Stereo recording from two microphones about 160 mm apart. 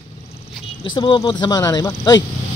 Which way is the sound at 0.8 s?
30° left (ahead or behind).